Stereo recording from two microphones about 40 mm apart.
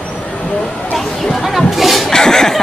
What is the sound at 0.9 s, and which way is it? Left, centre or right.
Speech, centre.